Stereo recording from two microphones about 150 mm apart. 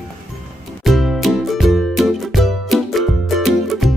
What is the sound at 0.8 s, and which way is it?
Music, centre (ahead or behind).